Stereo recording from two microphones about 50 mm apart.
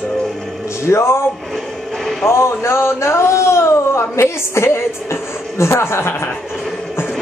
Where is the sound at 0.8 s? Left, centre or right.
Left.